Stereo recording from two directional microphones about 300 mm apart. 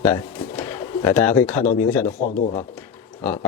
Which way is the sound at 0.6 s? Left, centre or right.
Centre.